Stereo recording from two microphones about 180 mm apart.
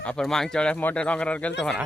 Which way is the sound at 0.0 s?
5° left (ahead or behind).